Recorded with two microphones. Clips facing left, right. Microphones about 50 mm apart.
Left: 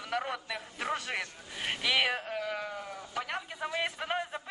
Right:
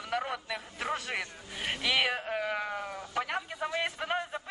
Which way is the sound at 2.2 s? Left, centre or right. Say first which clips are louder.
Right 3 dB; right.